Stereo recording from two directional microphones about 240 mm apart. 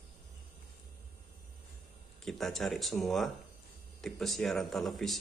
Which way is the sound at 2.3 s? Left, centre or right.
Centre.